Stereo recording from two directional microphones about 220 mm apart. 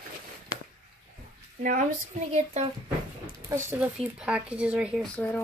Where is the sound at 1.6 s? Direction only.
35° right (ahead or behind).